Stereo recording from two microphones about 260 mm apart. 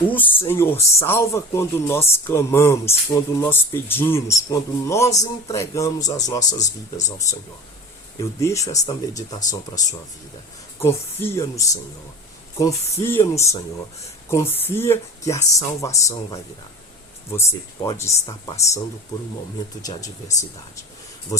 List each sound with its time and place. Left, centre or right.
0.1 s speech: centre
6.6 s speech: left
8.4 s speech: centre
19.8 s speech: centre